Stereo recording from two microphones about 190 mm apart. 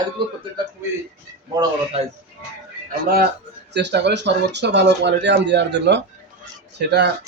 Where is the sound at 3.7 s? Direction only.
65° right (ahead or behind).